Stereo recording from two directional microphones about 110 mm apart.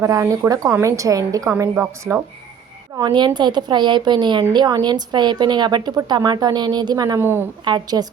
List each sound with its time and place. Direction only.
0.0 s a woman's voice: 30° right (ahead or behind)
1.7 s a woman's voice: 15° right (ahead or behind)
3.0 s speech: 40° right (ahead or behind)
7.2 s a woman's voice: 20° right (ahead or behind)
7.6 s speech: 40° right (ahead or behind)